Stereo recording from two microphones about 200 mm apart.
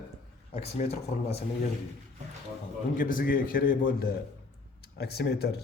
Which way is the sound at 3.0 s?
45° left (ahead or behind).